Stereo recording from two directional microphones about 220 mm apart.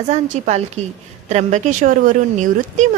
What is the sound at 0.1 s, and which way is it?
Speech, 30° right (ahead or behind).